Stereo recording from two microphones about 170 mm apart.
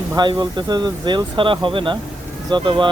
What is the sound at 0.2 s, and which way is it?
Speech, 25° right (ahead or behind).